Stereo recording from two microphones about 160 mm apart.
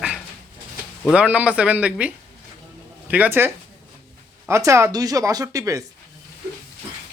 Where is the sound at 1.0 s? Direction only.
5° right (ahead or behind).